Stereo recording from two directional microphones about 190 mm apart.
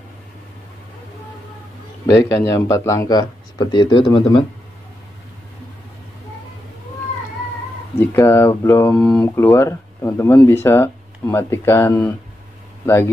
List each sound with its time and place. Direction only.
2.0 s speech: 15° left (ahead or behind)
8.1 s speech: 15° left (ahead or behind)